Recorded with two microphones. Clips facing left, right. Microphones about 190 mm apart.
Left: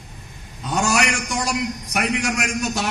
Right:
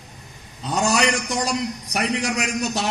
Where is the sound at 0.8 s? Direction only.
35° right (ahead or behind).